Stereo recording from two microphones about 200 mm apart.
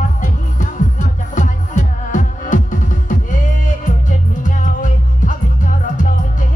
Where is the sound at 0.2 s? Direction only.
40° left (ahead or behind).